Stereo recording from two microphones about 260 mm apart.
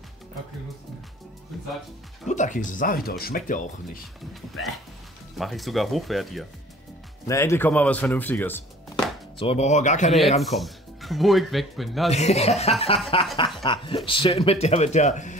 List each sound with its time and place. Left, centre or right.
2.2 s speech: left
4.3 s speech: centre
7.2 s a man's voice: centre
9.4 s speech: left
10.4 s speech: centre
12.1 s speech: left